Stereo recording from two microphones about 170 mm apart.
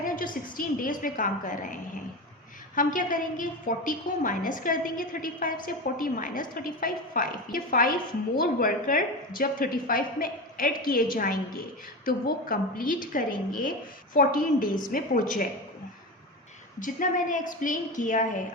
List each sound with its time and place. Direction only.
0.5 s a woman's voice: 55° left (ahead or behind)
16.8 s a woman's voice: 50° left (ahead or behind)